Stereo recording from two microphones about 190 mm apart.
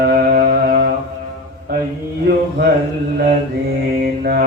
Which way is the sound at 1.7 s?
55° right (ahead or behind).